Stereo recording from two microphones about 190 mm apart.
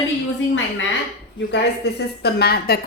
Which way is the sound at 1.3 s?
65° left (ahead or behind).